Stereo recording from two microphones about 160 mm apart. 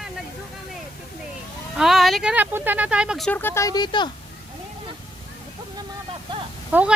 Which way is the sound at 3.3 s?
15° left (ahead or behind).